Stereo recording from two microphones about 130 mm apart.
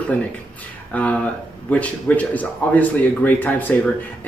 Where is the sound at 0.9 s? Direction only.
10° left (ahead or behind).